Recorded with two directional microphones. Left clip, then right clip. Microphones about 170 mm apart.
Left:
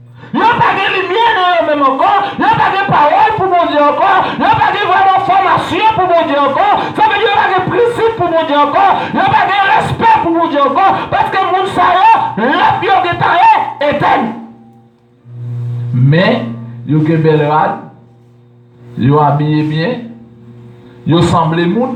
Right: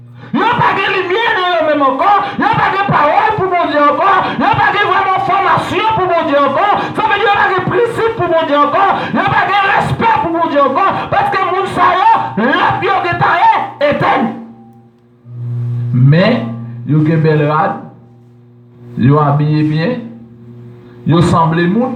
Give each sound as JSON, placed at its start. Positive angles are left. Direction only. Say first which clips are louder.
{"t": 0.3, "sound": "a man's voice", "louder": "left 2 dB", "side_deg": -30}
{"t": 16.0, "sound": "a man's voice", "louder": "left 1 dB", "side_deg": -25}
{"t": 18.9, "sound": "a man's voice", "louder": "left 2 dB", "side_deg": -25}
{"t": 21.1, "sound": "a man's voice", "louder": "even", "side_deg": -25}